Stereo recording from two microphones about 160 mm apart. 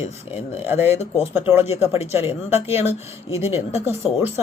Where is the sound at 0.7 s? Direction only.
15° right (ahead or behind).